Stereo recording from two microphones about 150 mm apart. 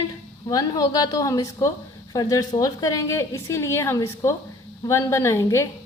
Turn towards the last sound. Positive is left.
turn(degrees=20)  # may be behind; listen again after turning